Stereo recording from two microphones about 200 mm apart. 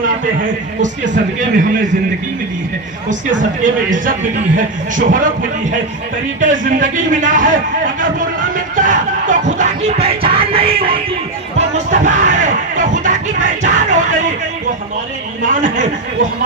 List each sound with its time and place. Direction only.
0.8 s a man's voice: 40° right (ahead or behind)
3.6 s a man's voice: 40° right (ahead or behind)
8.0 s music: 40° right (ahead or behind)
15.4 s a man's voice: 40° right (ahead or behind)